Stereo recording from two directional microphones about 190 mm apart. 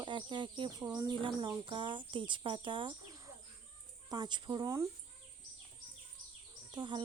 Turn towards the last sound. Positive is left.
turn(degrees=-25)  # may be behind; listen again after turning